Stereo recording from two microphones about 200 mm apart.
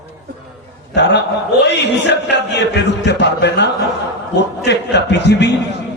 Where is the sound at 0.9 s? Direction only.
60° left (ahead or behind).